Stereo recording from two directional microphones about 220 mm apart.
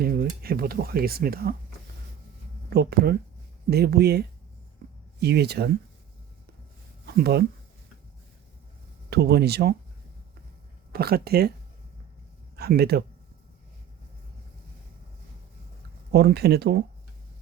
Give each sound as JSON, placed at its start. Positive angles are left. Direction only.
{"t": 0.0, "sound": "speech", "side_deg": -45}
{"t": 2.6, "sound": "speech", "side_deg": -45}
{"t": 7.0, "sound": "speech", "side_deg": -45}
{"t": 9.0, "sound": "speech", "side_deg": -50}
{"t": 10.9, "sound": "speech", "side_deg": -45}
{"t": 12.5, "sound": "speech", "side_deg": -45}
{"t": 16.1, "sound": "speech", "side_deg": -50}